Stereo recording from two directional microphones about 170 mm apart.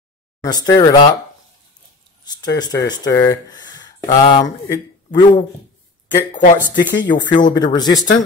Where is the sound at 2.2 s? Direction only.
25° left (ahead or behind).